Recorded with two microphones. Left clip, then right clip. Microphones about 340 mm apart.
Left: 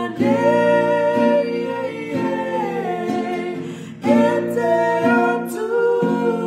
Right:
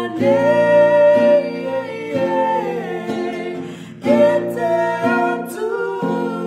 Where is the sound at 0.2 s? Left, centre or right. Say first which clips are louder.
Right 2 dB; centre.